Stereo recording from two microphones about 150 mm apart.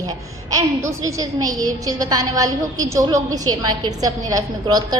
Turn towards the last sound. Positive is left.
turn(degrees=-25)  # may be behind; listen again after turning